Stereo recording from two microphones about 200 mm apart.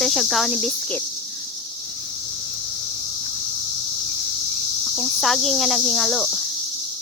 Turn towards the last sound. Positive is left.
turn(degrees=0)  # may be behind; listen again after turning